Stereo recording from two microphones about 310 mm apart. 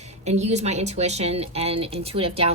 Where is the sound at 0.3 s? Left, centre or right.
Right.